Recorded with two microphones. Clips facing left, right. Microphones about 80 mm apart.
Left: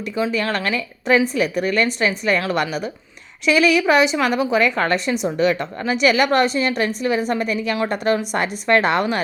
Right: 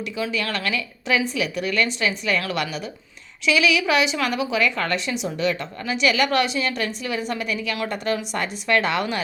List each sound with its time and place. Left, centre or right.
0.2 s a woman's voice: left